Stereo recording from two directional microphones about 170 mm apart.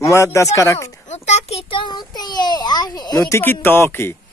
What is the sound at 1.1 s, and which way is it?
A child's voice, 40° left (ahead or behind).